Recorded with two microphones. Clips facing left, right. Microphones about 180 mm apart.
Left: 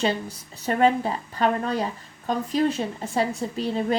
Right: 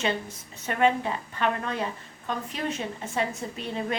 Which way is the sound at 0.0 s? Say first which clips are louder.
Left 4 dB; 35° left (ahead or behind).